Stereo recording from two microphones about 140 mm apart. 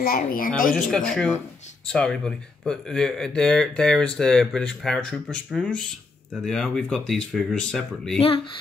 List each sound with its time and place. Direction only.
0.0 s speech: 90° left
0.7 s speech: 5° left (ahead or behind)